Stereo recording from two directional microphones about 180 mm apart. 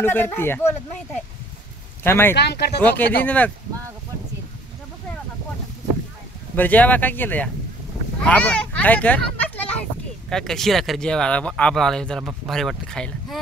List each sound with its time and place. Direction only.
0.0 s speech: 10° left (ahead or behind)
2.0 s speech: 10° left (ahead or behind)
2.3 s speech: 70° left (ahead or behind)
2.8 s speech: 10° left (ahead or behind)
6.5 s speech: 10° left (ahead or behind)
8.2 s a sound: 5° left (ahead or behind)
10.3 s speech: centre (ahead or behind)